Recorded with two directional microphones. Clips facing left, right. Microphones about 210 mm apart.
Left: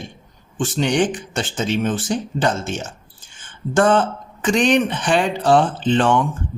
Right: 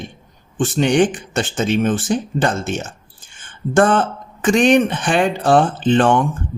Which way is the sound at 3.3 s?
55° right (ahead or behind).